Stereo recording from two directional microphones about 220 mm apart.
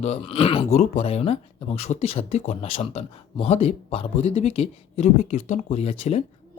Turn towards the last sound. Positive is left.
turn(degrees=30)  # may be behind; listen again after turning